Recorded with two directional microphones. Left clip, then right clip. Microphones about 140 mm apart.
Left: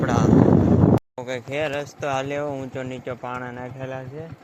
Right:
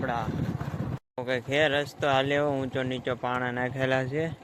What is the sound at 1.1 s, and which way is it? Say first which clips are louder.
Speech: right 1 dB; 5° right (ahead or behind).